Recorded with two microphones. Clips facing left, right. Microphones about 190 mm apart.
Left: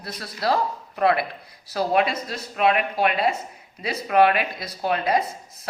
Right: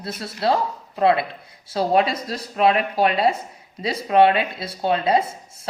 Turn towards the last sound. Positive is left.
turn(degrees=-30)  # may be behind; listen again after turning